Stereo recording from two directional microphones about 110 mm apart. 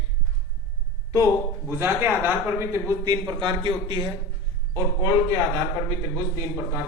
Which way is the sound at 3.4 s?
45° right (ahead or behind).